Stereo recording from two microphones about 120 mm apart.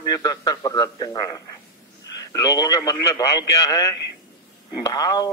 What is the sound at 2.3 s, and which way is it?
A man's voice, 30° left (ahead or behind).